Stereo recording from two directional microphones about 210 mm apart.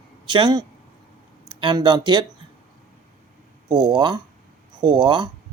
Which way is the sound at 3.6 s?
20° right (ahead or behind).